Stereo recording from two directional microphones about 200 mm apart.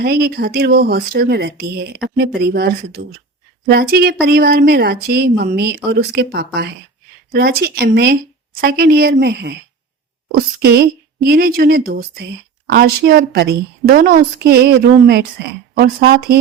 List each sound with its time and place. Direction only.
0.0 s a woman's voice: 50° right (ahead or behind)